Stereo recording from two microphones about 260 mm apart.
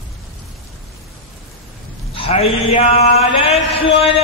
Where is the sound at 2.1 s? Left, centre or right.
Left.